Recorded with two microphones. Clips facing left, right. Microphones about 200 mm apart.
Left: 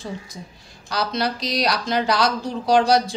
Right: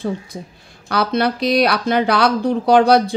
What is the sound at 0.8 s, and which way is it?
Speech, 60° right (ahead or behind).